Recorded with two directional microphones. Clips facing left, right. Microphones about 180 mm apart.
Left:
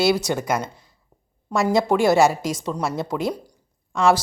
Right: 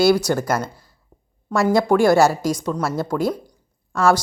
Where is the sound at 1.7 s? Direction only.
Centre (ahead or behind).